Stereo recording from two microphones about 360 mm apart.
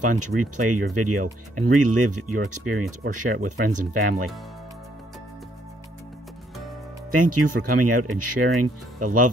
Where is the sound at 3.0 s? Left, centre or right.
Right.